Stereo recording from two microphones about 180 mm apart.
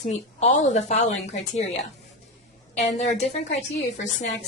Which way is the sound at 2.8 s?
40° left (ahead or behind).